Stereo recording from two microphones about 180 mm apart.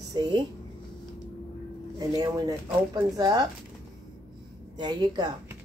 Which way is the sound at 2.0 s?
20° right (ahead or behind).